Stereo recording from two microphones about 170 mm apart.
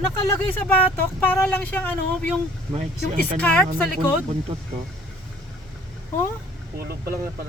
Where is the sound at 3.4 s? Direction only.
5° left (ahead or behind).